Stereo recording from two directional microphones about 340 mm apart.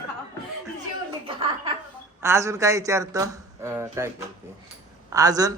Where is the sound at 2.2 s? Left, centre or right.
Centre.